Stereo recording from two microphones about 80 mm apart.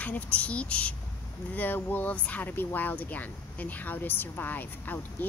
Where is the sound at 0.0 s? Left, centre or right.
Centre.